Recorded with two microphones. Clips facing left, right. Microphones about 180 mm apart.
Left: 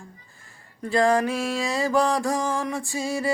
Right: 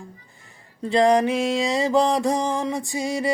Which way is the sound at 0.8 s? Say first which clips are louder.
Right 3 dB; 20° right (ahead or behind).